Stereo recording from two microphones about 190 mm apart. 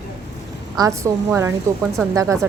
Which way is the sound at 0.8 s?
15° right (ahead or behind).